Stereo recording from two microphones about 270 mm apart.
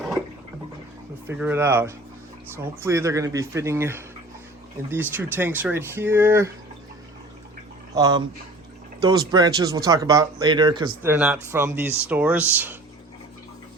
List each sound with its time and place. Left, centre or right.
1.3 s speech: centre
7.9 s speech: centre